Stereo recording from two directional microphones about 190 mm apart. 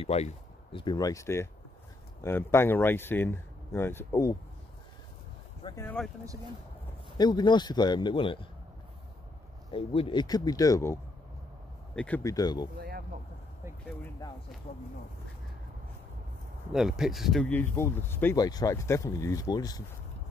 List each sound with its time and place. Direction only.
0.0 s speech: 30° left (ahead or behind); by 4.4 s 15° left (ahead or behind)
5.8 s speech: 10° left (ahead or behind)
7.2 s speech: 20° left (ahead or behind)
9.7 s speech: 30° left (ahead or behind)
12.7 s a sound: 55° right (ahead or behind)
16.7 s speech: centre (ahead or behind); by 19.8 s 20° left (ahead or behind)